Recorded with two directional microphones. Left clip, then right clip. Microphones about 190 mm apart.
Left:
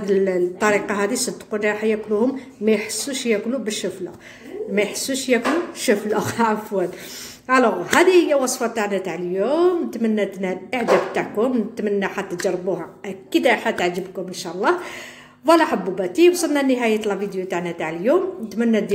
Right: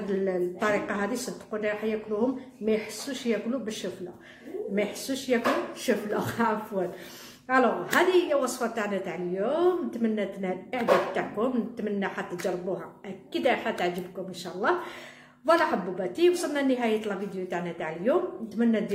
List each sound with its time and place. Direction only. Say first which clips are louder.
0.1 s speech: left 10 dB; 45° left (ahead or behind)
4.7 s a woman's voice: left 9 dB; 40° left (ahead or behind)
13.3 s a woman's voice: left 8 dB; 35° left (ahead or behind)